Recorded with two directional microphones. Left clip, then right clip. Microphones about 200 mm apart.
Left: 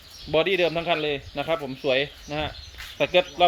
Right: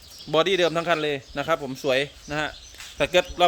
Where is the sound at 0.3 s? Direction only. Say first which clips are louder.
Right 1 dB; 20° right (ahead or behind).